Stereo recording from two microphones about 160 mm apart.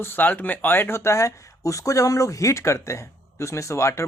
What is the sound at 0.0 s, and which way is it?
Speech, 10° left (ahead or behind).